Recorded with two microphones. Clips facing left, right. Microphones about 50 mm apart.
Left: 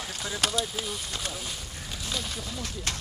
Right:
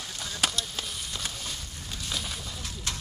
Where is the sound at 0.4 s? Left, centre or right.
Centre.